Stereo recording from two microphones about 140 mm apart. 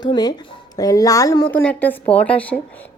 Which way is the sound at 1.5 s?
10° left (ahead or behind).